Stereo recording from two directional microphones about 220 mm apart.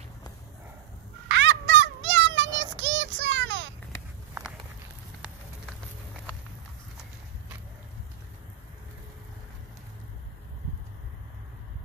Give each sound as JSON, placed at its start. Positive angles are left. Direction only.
{"t": 1.3, "sound": "child singing", "side_deg": -55}